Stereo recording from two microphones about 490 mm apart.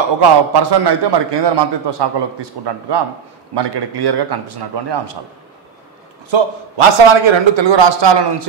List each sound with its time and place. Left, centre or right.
0.5 s a man's voice: right
6.3 s a man's voice: right